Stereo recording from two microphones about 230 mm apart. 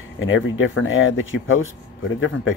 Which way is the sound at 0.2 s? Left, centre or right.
Left.